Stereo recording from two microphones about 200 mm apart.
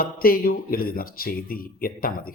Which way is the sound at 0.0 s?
45° left (ahead or behind).